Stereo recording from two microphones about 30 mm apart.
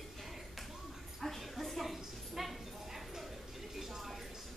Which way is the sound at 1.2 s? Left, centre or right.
Centre.